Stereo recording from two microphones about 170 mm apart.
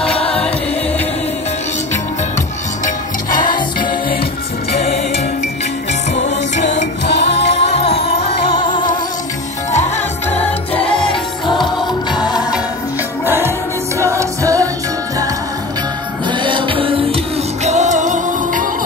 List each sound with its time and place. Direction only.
6.5 s music: 45° left (ahead or behind)
7.1 s music: 85° left
7.6 s music: 35° left (ahead or behind)
10.3 s music: 35° left (ahead or behind)
13.2 s music: 15° right (ahead or behind)
16.3 s music: 30° right (ahead or behind)
17.6 s music: 45° right (ahead or behind)